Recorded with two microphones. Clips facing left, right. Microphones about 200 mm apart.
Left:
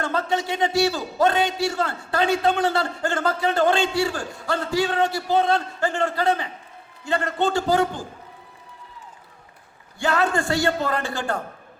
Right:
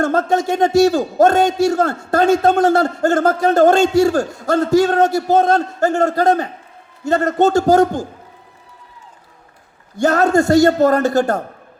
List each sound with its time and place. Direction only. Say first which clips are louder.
0.0 s a man's voice: right 8 dB; 45° right (ahead or behind)
10.0 s a man's voice: right 8 dB; 40° right (ahead or behind)